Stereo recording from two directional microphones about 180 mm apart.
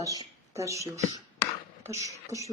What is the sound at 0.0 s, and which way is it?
A woman's voice, 20° right (ahead or behind).